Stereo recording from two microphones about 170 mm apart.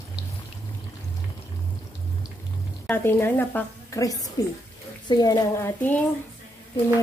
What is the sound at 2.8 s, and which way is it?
A woman's voice, 15° left (ahead or behind).